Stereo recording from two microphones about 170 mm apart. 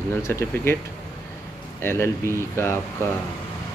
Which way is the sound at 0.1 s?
15° left (ahead or behind).